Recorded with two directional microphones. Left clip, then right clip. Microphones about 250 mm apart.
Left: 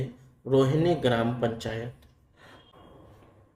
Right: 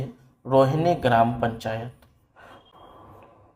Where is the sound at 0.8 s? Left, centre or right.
Centre.